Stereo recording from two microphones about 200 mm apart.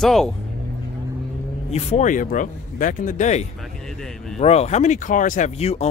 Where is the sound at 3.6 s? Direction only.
Centre (ahead or behind).